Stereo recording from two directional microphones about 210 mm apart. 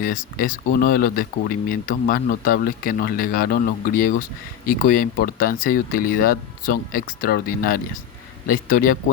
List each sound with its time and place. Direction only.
0.0 s speech: 40° left (ahead or behind)